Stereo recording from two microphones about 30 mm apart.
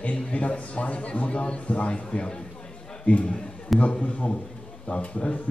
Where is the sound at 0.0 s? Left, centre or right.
Left.